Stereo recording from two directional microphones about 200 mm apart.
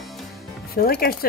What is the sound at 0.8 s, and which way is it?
Speech, 50° left (ahead or behind).